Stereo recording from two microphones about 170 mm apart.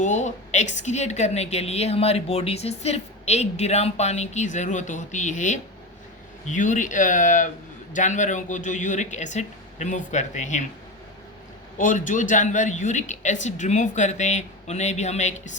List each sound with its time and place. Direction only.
0.0 s a woman's voice: 45° left (ahead or behind)
11.8 s speech: 50° left (ahead or behind)